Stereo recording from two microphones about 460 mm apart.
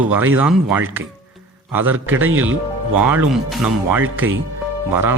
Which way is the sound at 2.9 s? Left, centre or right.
Centre.